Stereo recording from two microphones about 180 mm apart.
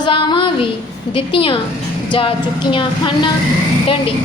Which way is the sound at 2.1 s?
30° left (ahead or behind).